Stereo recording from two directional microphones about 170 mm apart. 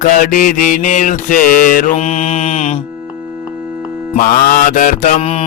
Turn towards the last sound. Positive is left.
turn(degrees=35)  # may be behind; listen again after turning